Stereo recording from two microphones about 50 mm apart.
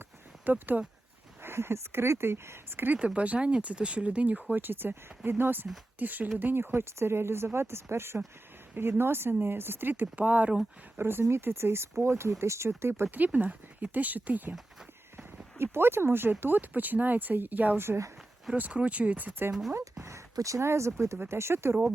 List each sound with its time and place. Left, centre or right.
0.5 s speech: right
1.4 s speech: right
3.2 s speech: right
4.6 s speech: right
6.4 s speech: right
9.9 s speech: right
10.9 s speech: right
13.1 s speech: right
15.5 s speech: right
17.7 s speech: right
18.5 s speech: right
19.7 s speech: right
21.2 s speech: right